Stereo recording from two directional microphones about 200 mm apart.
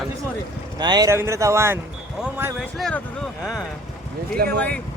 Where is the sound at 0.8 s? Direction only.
20° right (ahead or behind).